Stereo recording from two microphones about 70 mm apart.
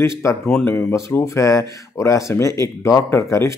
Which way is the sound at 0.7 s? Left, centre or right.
Left.